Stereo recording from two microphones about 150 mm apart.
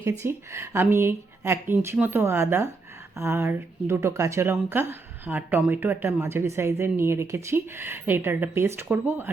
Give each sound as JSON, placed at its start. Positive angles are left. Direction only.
{"t": 0.0, "sound": "speech", "side_deg": -15}